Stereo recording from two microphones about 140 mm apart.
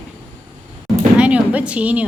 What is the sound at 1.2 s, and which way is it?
Speech, 10° right (ahead or behind).